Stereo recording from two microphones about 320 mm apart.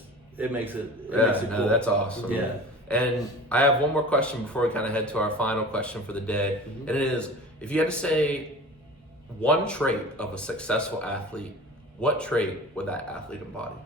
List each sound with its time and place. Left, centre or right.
0.3 s speech: centre
9.4 s speech: centre